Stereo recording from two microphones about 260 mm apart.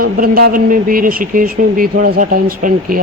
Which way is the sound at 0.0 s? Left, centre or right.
Right.